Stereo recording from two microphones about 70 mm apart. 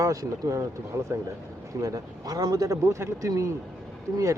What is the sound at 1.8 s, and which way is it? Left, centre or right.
Speech, right.